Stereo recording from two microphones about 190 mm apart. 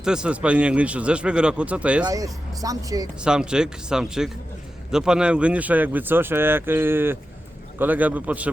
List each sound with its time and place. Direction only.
0.0 s speech: 5° right (ahead or behind)
2.0 s speech: 20° right (ahead or behind)
3.2 s speech: 5° right (ahead or behind)